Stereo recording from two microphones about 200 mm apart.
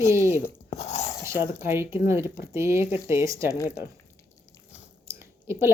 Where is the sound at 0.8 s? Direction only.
35° left (ahead or behind).